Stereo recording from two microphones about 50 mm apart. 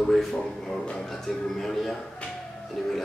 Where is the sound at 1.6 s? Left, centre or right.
Centre.